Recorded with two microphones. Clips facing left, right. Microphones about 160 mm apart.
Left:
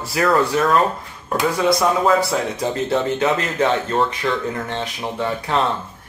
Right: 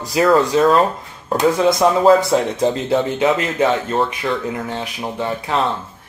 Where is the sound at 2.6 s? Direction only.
20° right (ahead or behind).